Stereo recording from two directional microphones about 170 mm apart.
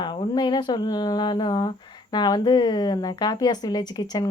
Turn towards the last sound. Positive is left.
turn(degrees=25)  # may be behind; listen again after turning